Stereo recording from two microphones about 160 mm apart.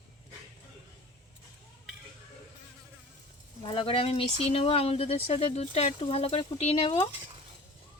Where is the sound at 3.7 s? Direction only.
35° left (ahead or behind).